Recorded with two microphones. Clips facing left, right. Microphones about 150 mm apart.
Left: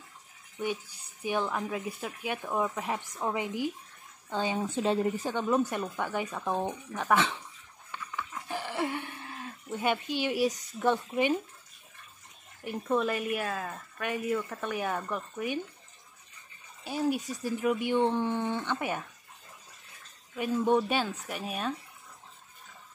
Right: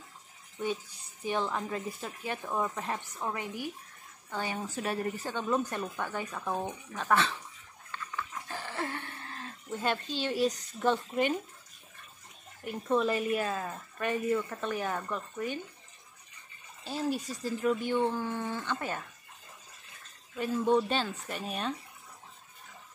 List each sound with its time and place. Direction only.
1.2 s a woman's voice: 10° left (ahead or behind)
7.9 s a sound: 15° left (ahead or behind)
10.9 s a woman's voice: 10° left (ahead or behind)
12.6 s a woman's voice: centre (ahead or behind)
16.8 s a woman's voice: 5° left (ahead or behind)
20.3 s a woman's voice: 15° left (ahead or behind)